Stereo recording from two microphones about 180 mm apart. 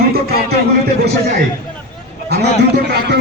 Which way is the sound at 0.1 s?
60° right (ahead or behind).